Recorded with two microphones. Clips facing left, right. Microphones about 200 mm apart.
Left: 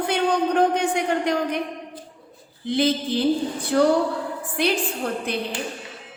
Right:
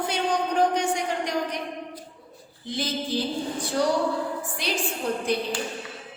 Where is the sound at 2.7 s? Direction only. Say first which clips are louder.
Left 7 dB; 60° left (ahead or behind).